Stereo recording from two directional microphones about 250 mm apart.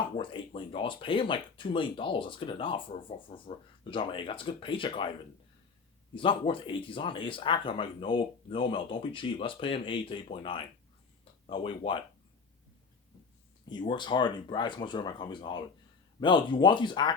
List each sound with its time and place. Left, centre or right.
0.2 s speech: centre
6.1 s speech: left
13.7 s speech: centre